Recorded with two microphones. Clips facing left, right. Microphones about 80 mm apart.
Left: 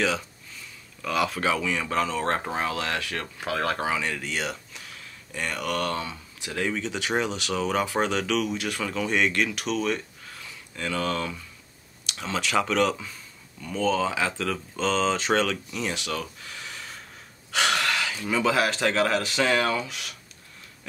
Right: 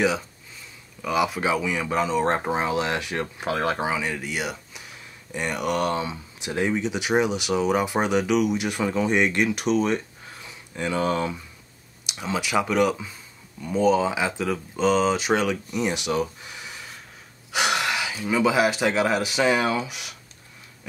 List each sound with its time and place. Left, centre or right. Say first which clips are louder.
1.0 s speech: right 2 dB; centre